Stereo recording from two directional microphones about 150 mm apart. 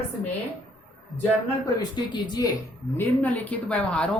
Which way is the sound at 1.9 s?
30° left (ahead or behind).